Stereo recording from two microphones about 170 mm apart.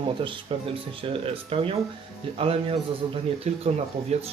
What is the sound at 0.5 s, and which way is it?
Speech, 35° right (ahead or behind).